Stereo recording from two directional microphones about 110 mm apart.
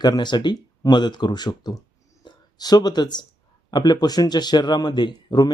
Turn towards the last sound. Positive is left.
turn(degrees=45)  # may be behind; listen again after turning